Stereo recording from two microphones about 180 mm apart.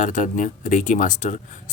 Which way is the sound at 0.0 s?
45° left (ahead or behind).